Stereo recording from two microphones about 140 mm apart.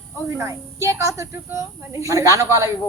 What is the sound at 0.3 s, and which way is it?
Speech, 20° right (ahead or behind).